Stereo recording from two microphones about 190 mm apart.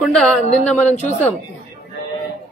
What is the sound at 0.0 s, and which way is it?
Speech, centre (ahead or behind).